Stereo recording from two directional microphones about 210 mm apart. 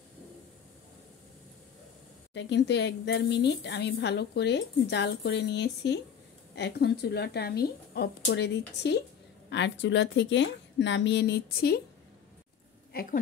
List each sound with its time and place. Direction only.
2.3 s a woman's voice: 55° left (ahead or behind)
12.9 s speech: 40° left (ahead or behind)